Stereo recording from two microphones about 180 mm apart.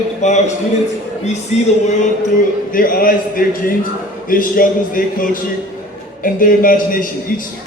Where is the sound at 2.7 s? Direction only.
50° left (ahead or behind).